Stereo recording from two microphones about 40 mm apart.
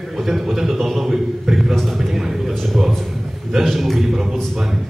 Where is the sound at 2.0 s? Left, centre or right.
Centre.